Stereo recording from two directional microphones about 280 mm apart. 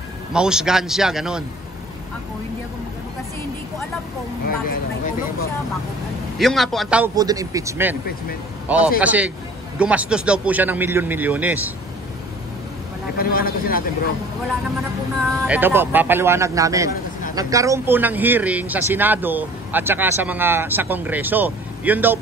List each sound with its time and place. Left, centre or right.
0.3 s a man's voice: centre
4.5 s a man's voice: left
6.3 s a man's voice: centre
13.2 s a man's voice: left
15.4 s speech: centre